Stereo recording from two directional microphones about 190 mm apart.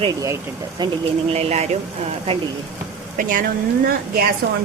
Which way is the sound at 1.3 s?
35° right (ahead or behind).